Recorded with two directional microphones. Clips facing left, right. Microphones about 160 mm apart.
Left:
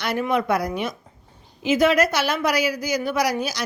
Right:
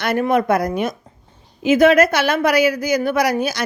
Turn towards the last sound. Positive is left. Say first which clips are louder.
# right 5 dB
turn(degrees=-55)  # may be behind; listen again after turning